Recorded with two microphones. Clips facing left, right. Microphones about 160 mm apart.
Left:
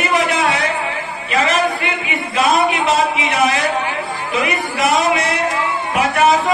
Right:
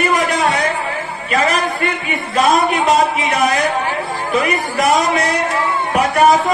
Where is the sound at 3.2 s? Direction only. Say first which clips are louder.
Even; centre (ahead or behind).